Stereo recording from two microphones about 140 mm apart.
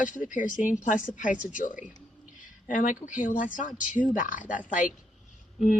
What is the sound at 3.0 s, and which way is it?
Speech, 70° left (ahead or behind).